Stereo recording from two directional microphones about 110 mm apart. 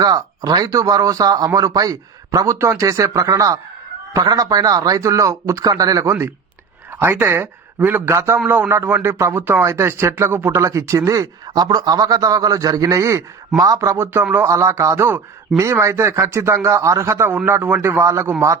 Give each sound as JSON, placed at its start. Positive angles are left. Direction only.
{"t": 0.0, "sound": "speech", "side_deg": -35}